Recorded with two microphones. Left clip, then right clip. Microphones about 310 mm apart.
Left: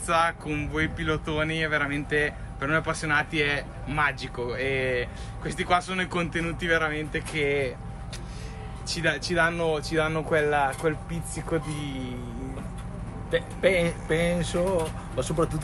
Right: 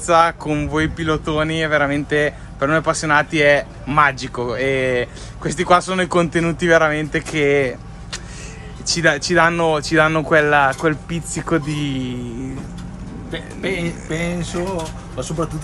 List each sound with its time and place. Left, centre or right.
0.0 s speech: centre; by 12.1 s right
13.3 s speech: centre